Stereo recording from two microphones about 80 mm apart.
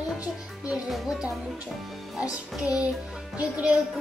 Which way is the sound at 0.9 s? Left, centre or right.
Centre.